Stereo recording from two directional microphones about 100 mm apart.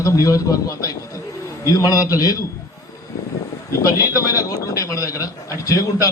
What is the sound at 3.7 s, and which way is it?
A man's voice, 35° left (ahead or behind).